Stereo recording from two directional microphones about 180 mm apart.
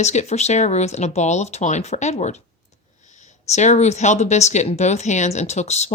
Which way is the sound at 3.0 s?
40° left (ahead or behind).